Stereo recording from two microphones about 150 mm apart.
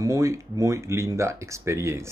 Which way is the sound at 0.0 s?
20° right (ahead or behind).